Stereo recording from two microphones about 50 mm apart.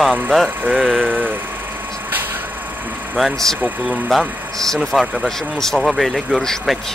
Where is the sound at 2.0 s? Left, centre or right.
Right.